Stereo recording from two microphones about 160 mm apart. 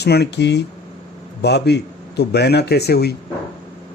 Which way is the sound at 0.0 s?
90° left.